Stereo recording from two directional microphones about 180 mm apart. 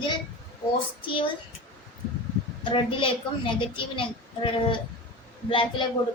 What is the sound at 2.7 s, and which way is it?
A child's voice, 30° left (ahead or behind).